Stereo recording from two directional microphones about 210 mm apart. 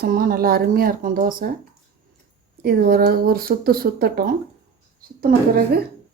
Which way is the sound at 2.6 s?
45° right (ahead or behind).